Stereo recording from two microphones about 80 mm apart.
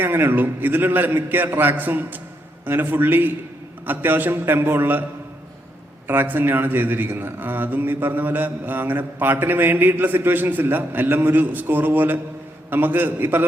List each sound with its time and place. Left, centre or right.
0.0 s speech: right
6.1 s speech: right